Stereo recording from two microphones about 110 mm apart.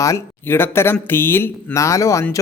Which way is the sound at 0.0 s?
25° left (ahead or behind).